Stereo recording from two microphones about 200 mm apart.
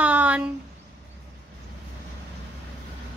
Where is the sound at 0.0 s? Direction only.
10° right (ahead or behind).